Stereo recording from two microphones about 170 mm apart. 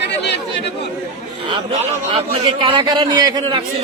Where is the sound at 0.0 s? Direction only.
85° left.